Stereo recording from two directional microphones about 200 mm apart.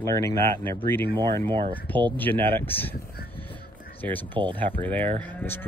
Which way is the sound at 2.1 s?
10° left (ahead or behind).